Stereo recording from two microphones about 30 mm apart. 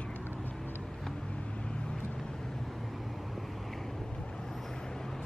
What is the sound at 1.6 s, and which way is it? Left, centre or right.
Vehicle, left.